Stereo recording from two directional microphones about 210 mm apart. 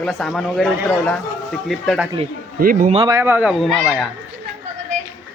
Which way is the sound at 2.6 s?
40° right (ahead or behind).